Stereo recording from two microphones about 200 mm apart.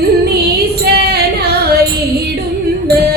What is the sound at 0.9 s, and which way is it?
Music, 50° right (ahead or behind).